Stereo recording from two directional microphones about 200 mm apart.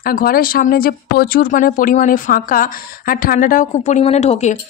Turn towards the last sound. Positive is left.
turn(degrees=35)  # may be behind; listen again after turning